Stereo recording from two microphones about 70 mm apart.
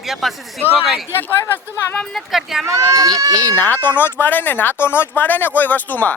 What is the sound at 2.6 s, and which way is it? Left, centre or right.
Speech, right.